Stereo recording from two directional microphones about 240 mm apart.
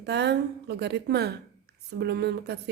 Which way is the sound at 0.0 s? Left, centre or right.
Right.